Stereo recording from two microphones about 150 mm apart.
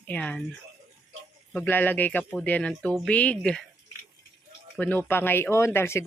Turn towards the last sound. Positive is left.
turn(degrees=15)  # may be behind; listen again after turning